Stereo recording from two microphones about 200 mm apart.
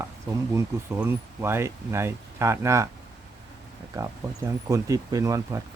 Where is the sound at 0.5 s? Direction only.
10° right (ahead or behind).